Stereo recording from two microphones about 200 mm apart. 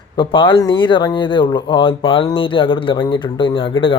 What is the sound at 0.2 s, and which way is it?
Speech, 25° left (ahead or behind).